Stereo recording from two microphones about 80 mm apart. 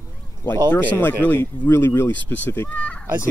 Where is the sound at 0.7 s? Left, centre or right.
Left.